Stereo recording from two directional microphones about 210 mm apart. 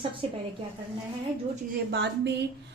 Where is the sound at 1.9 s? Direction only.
55° right (ahead or behind).